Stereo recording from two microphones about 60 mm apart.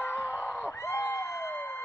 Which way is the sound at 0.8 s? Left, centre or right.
Left.